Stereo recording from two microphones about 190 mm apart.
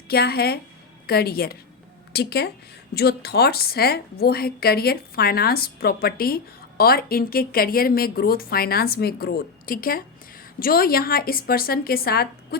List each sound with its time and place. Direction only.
0.1 s a woman's voice: 55° left (ahead or behind)